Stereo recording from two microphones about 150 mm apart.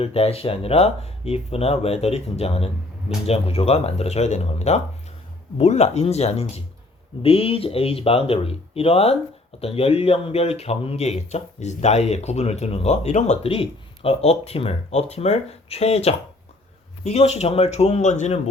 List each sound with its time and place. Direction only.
0.0 s speech: 40° left (ahead or behind)